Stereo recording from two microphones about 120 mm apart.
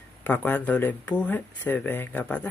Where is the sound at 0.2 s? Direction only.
15° left (ahead or behind).